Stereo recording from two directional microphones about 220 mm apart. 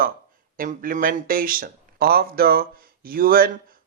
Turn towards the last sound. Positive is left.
turn(degrees=-40)  # may be behind; listen again after turning